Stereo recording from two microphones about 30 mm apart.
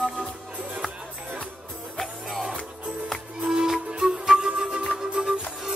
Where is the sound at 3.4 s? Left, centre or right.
Right.